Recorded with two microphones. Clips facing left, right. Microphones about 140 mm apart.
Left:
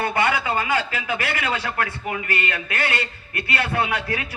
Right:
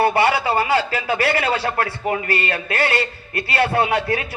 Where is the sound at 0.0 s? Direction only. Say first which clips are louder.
Right 5 dB; 30° right (ahead or behind).